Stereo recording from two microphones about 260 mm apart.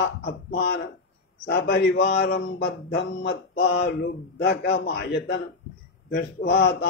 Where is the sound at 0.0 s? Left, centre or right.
Left.